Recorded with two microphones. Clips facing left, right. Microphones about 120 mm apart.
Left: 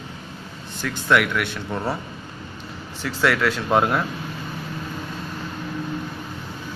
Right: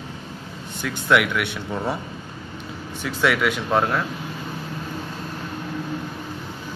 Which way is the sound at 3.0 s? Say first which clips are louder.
Even; 5° right (ahead or behind).